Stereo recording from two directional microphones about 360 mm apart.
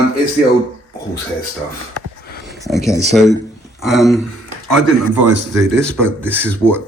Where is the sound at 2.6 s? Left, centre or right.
Centre.